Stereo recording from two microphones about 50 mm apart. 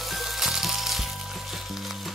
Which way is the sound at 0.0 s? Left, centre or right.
Centre.